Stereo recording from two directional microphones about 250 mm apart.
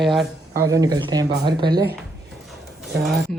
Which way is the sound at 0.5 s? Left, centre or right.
Centre.